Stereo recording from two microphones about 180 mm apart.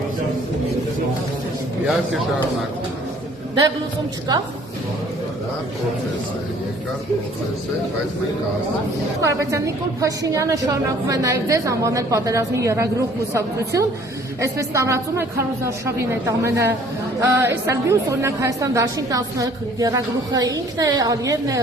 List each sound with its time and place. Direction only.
9.2 s a woman's voice: 15° right (ahead or behind)